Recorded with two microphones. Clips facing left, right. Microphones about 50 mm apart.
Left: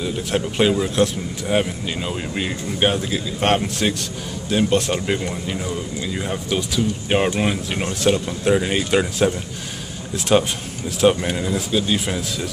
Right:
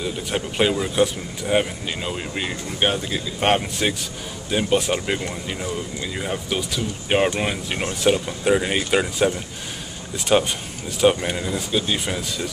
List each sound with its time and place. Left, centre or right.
0.0 s speech: centre